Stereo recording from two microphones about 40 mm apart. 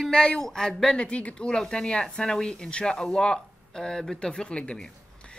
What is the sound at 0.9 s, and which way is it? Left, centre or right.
Speech, left.